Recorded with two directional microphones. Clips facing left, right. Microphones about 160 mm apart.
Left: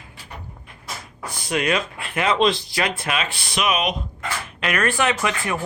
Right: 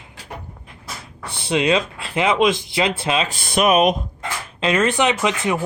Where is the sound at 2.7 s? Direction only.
25° right (ahead or behind).